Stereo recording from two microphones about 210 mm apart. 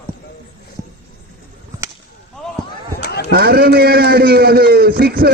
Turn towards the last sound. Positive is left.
turn(degrees=-50)  # may be behind; listen again after turning